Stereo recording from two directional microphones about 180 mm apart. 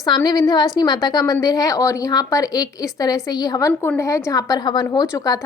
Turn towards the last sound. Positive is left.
turn(degrees=20)  # may be behind; listen again after turning